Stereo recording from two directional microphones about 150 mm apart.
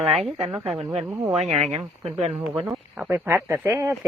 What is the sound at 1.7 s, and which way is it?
Speech, 45° right (ahead or behind).